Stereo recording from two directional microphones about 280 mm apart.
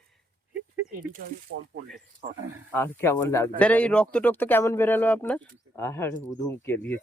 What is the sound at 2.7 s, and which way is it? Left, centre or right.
Speech, centre.